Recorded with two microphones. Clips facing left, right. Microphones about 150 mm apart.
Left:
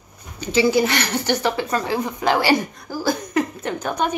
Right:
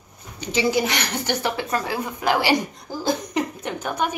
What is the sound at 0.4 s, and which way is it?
A woman's voice, 15° right (ahead or behind).